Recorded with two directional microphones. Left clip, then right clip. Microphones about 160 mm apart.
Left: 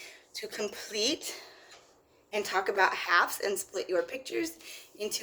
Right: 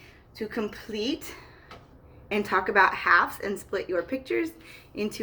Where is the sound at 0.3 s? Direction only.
35° left (ahead or behind).